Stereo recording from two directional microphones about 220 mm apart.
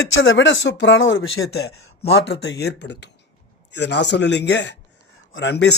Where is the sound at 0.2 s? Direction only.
60° left (ahead or behind).